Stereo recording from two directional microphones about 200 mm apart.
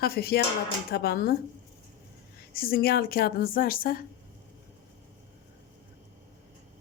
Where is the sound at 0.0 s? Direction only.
50° left (ahead or behind).